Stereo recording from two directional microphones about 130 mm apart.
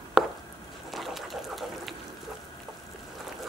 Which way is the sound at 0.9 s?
Centre (ahead or behind).